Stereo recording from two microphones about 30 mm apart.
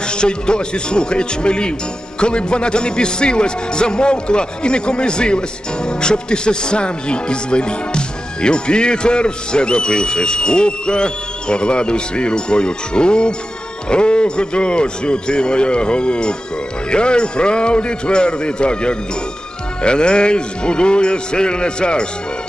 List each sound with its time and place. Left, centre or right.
0.0 s speech: left